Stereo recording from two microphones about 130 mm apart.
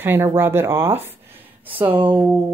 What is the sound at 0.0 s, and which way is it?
A woman's voice, 15° right (ahead or behind).